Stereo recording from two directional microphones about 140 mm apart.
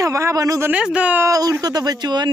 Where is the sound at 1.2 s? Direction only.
25° right (ahead or behind).